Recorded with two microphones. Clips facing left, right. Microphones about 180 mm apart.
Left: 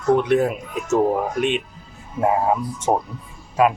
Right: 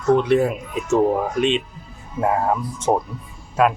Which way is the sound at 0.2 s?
Centre (ahead or behind).